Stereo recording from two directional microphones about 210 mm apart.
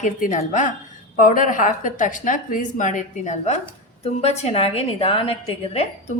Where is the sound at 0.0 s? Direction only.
35° left (ahead or behind).